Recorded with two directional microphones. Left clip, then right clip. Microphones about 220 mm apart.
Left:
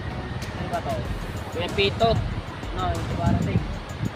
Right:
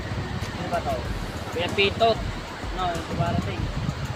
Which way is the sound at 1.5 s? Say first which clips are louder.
Right 1 dB; centre (ahead or behind).